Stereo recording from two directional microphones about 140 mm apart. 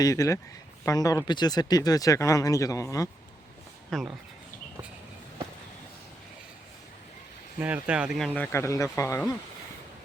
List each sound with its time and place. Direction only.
0.0 s speech: 25° left (ahead or behind)
3.8 s speech: centre (ahead or behind)
7.6 s speech: 10° right (ahead or behind)
8.4 s speech: 20° left (ahead or behind)